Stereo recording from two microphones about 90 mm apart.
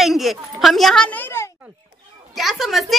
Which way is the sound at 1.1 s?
25° left (ahead or behind).